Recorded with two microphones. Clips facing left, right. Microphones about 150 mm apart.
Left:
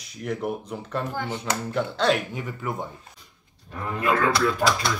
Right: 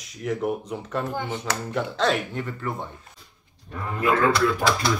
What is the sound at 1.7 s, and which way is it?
Speech, centre (ahead or behind).